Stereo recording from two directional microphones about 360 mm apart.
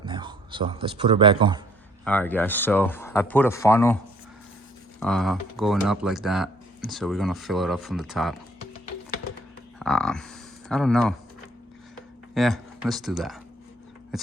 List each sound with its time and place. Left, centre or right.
0.0 s speech: centre
2.0 s speech: centre
4.9 s speech: centre
9.7 s speech: centre
12.3 s speech: centre